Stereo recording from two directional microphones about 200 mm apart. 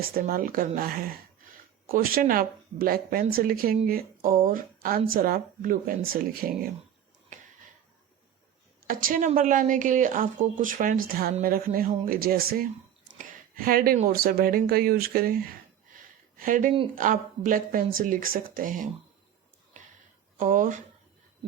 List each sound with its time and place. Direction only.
0.1 s speech: 45° right (ahead or behind)
8.9 s a woman's voice: 45° right (ahead or behind)
16.0 s a sound: 40° right (ahead or behind)
16.9 s speech: 40° right (ahead or behind)
19.8 s a sound: 40° right (ahead or behind)
20.4 s speech: 40° right (ahead or behind)